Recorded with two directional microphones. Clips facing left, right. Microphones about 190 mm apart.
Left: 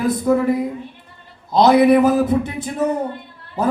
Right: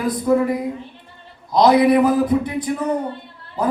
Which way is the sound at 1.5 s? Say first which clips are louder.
Left 1 dB; 25° left (ahead or behind).